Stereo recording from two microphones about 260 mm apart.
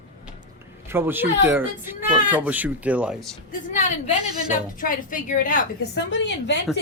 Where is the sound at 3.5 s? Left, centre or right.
Left.